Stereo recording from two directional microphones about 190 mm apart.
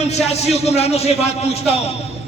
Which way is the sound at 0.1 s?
35° left (ahead or behind).